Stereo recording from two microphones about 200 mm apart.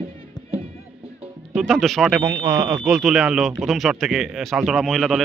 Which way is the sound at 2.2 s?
15° right (ahead or behind).